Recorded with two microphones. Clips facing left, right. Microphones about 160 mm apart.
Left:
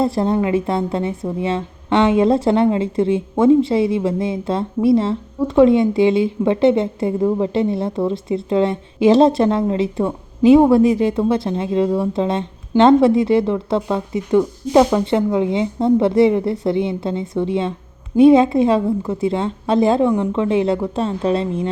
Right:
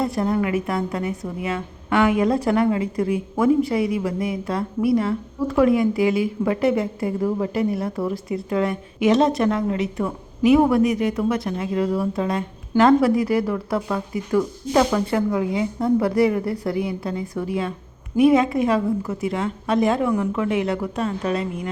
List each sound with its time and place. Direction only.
0.0 s a woman's voice: 30° left (ahead or behind)